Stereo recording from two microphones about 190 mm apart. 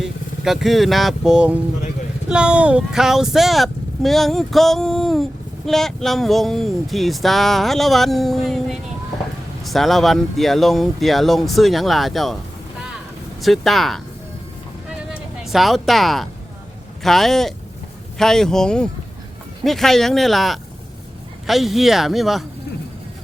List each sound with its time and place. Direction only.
0.0 s speech: centre (ahead or behind)
13.4 s speech: centre (ahead or behind)
15.4 s speech: centre (ahead or behind)